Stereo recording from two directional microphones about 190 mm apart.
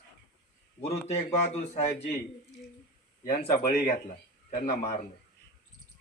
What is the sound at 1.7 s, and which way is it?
Speech, 35° left (ahead or behind).